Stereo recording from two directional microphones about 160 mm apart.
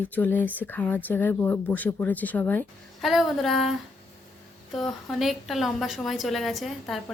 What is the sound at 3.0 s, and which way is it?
Speech, centre (ahead or behind).